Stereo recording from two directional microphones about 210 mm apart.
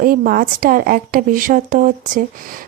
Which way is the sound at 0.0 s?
40° right (ahead or behind).